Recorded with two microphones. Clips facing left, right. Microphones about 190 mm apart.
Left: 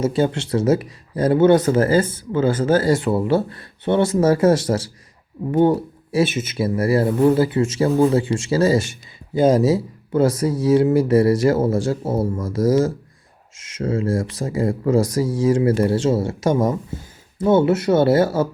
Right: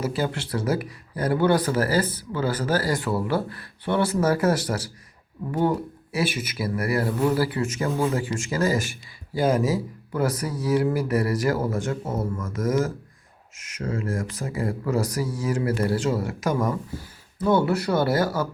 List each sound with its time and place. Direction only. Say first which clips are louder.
0.0 s speech: left 7 dB; 25° left (ahead or behind)